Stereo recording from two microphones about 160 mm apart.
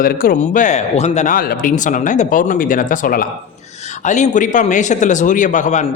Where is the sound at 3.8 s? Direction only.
50° left (ahead or behind).